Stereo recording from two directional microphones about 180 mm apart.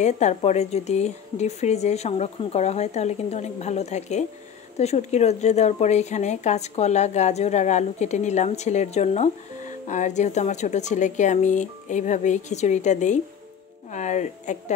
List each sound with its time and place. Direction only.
0.0 s speech: 40° left (ahead or behind)